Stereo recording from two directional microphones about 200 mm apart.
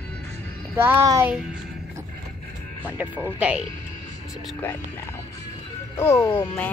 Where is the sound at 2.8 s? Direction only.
10° right (ahead or behind).